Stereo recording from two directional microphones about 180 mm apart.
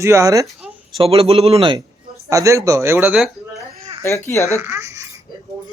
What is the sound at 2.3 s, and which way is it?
Speech, 15° right (ahead or behind).